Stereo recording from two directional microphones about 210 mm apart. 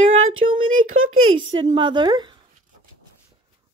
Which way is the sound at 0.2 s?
75° right (ahead or behind).